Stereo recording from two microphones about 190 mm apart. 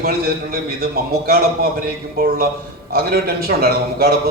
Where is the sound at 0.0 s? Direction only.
55° right (ahead or behind).